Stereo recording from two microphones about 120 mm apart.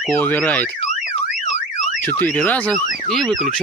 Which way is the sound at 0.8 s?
85° left.